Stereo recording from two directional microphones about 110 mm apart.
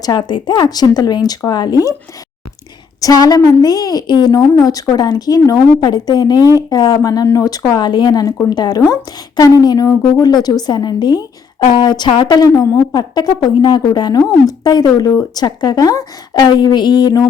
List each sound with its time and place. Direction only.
0.0 s speech: 40° left (ahead or behind)
3.0 s speech: 35° left (ahead or behind)